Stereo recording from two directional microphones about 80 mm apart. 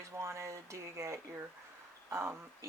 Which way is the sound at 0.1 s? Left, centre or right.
Right.